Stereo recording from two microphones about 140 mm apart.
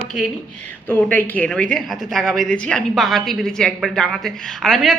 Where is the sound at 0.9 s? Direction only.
10° left (ahead or behind).